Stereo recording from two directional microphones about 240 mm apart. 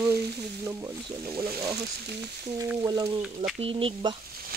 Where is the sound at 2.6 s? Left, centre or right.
Centre.